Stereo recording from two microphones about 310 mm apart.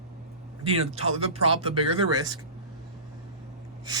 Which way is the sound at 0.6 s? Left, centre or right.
Centre.